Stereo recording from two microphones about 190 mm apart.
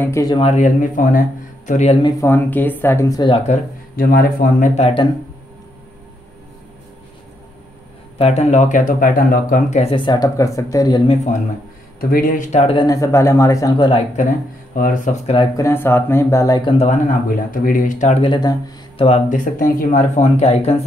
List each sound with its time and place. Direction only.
0.0 s speech: 15° left (ahead or behind)
0.4 s speech: 35° left (ahead or behind)
2.0 s speech: 15° left (ahead or behind)
3.9 s speech: 50° left (ahead or behind); by 5.0 s 35° left (ahead or behind)
8.2 s speech: 35° left (ahead or behind); by 11.0 s 20° left (ahead or behind)
12.0 s speech: 50° left (ahead or behind); by 14.0 s 25° left (ahead or behind)
14.7 s speech: 45° left (ahead or behind)
15.3 s speech: 15° left (ahead or behind)
16.7 s speech: 35° left (ahead or behind)
19.0 s speech: 40° left (ahead or behind)